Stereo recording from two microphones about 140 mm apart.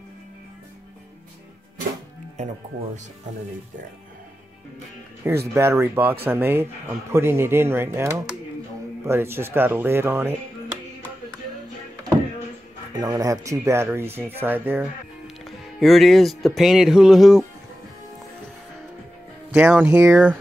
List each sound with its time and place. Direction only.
5.2 s speech: 15° right (ahead or behind)
12.9 s speech: 25° right (ahead or behind)
15.2 s speech: centre (ahead or behind)
19.5 s speech: 10° right (ahead or behind)
19.9 s speech: 20° right (ahead or behind)